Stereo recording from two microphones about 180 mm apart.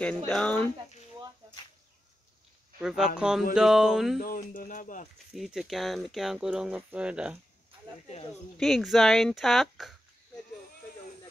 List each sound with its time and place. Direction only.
0.3 s speech: 5° left (ahead or behind)
2.8 s speech: 5° right (ahead or behind)
4.2 s speech: 50° left (ahead or behind)
5.3 s speech: centre (ahead or behind)
8.5 s speech: centre (ahead or behind)